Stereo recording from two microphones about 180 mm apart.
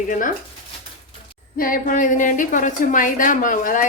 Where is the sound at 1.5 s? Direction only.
50° left (ahead or behind).